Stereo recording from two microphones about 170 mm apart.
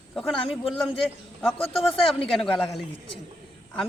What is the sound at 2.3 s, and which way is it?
Speech, centre (ahead or behind).